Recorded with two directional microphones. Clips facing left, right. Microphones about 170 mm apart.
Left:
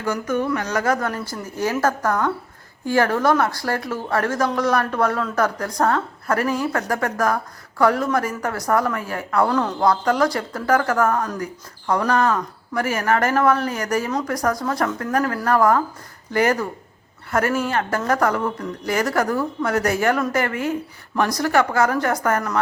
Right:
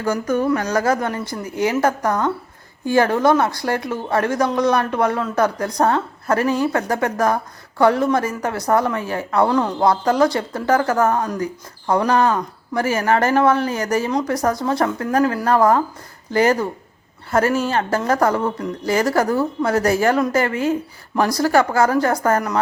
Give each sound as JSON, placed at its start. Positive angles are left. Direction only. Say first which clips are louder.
{"t": 0.0, "sound": "speech", "louder": "right 3 dB", "side_deg": -40}
{"t": 1.5, "sound": "speech", "louder": "right 3 dB", "side_deg": -20}
{"t": 9.5, "sound": "speech", "louder": "right 2 dB", "side_deg": -10}
{"t": 9.8, "sound": "speech", "louder": "right 2 dB", "side_deg": -25}